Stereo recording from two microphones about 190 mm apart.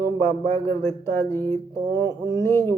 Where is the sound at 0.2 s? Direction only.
15° left (ahead or behind).